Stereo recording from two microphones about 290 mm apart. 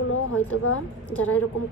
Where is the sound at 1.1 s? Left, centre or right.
Centre.